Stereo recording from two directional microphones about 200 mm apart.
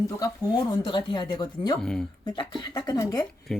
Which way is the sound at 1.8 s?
5° left (ahead or behind).